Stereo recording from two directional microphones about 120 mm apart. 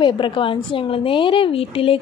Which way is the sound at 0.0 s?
45° left (ahead or behind).